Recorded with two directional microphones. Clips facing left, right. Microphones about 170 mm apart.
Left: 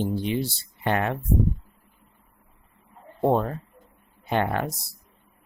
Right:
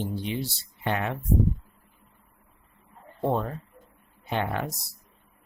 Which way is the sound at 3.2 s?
60° left (ahead or behind).